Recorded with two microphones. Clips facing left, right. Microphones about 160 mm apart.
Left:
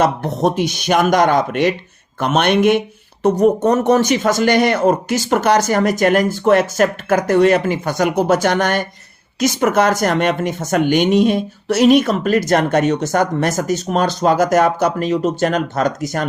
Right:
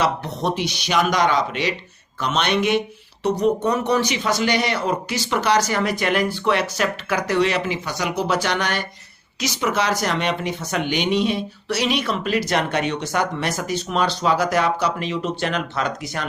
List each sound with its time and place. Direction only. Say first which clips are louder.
0.0 s speech: left 6 dB; 50° left (ahead or behind)